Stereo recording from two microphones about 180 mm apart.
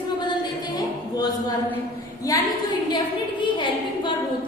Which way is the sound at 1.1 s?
20° left (ahead or behind).